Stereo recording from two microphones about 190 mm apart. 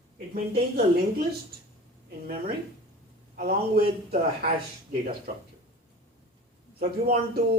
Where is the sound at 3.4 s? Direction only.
50° right (ahead or behind).